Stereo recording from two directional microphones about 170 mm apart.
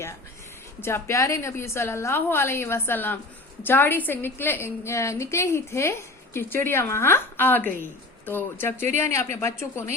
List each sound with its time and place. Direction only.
0.8 s a woman's voice: 15° left (ahead or behind)